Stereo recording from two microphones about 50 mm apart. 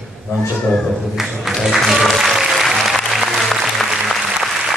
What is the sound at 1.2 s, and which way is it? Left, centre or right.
Speech, centre.